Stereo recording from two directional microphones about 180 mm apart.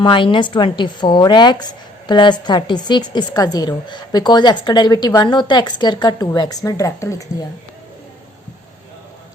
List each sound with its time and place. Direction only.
0.0 s a woman's voice: 25° left (ahead or behind)